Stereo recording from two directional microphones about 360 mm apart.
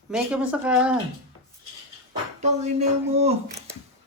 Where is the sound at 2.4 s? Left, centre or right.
Centre.